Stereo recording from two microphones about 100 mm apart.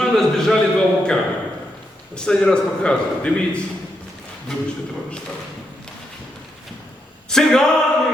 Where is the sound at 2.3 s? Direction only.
10° left (ahead or behind).